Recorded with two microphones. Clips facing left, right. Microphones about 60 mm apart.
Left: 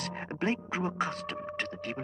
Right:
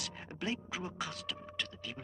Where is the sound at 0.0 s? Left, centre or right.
Left.